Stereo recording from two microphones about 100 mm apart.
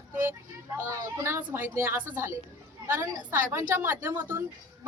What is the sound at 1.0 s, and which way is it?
A woman's voice, 25° right (ahead or behind).